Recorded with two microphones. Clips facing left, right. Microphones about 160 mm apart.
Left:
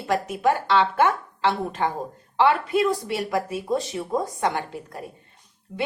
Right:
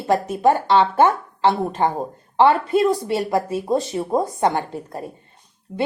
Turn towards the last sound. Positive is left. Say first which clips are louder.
# right 4 dB
turn(degrees=-35)  # may be behind; listen again after turning